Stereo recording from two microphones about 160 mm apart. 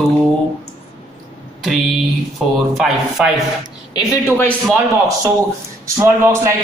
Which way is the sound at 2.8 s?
Centre (ahead or behind).